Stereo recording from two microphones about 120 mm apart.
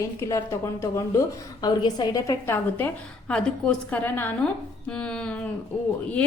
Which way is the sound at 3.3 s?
5° left (ahead or behind).